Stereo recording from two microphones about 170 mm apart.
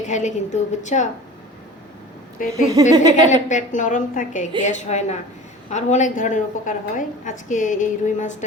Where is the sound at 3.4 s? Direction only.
45° left (ahead or behind).